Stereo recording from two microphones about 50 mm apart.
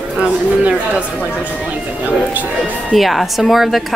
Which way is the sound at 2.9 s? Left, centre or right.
Centre.